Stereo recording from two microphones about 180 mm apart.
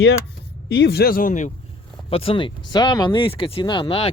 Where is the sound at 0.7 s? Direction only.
70° left (ahead or behind); by 1.5 s 45° left (ahead or behind).